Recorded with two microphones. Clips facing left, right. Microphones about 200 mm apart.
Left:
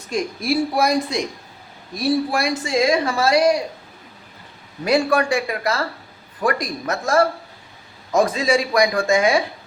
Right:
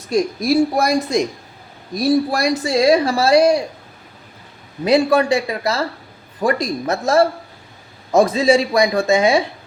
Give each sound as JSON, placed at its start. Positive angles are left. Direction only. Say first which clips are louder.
{"t": 0.1, "sound": "speech", "louder": "right 5 dB", "side_deg": -40}
{"t": 4.9, "sound": "speech", "louder": "right 4 dB", "side_deg": -25}